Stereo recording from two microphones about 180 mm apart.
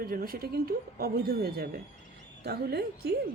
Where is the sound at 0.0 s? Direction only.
55° right (ahead or behind).